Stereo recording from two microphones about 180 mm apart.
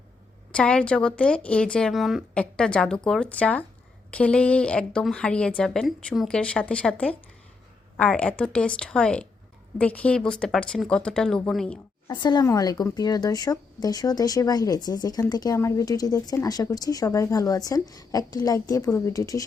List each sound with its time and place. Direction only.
0.5 s speech: 5° left (ahead or behind)
12.0 s speech: 25° left (ahead or behind)